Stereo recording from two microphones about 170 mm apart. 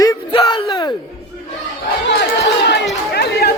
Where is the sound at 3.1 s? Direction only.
75° left (ahead or behind).